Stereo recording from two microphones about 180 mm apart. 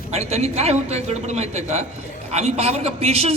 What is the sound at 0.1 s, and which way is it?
A man's voice, 35° right (ahead or behind).